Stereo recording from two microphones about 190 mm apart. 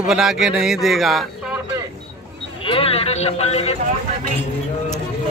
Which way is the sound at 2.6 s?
30° left (ahead or behind).